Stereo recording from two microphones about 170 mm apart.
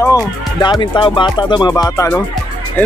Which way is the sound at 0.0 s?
20° left (ahead or behind).